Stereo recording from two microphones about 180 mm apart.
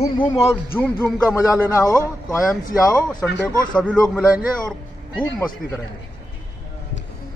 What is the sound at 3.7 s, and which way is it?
Speech, 5° left (ahead or behind).